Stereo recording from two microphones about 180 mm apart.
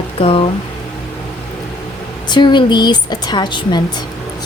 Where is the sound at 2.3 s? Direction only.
25° left (ahead or behind).